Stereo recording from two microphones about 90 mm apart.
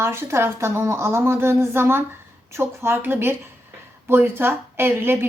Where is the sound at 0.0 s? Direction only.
30° right (ahead or behind).